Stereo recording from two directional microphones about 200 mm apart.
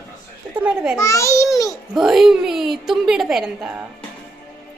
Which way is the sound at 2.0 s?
Centre (ahead or behind).